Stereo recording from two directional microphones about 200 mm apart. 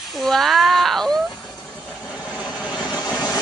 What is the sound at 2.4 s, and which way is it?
Vehicle, 5° right (ahead or behind).